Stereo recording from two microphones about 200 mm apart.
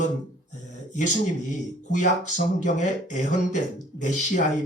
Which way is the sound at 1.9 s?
40° left (ahead or behind).